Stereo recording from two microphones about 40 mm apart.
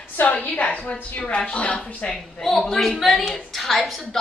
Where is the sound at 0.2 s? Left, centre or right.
Left.